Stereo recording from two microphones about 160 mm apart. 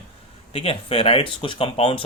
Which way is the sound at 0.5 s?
35° left (ahead or behind).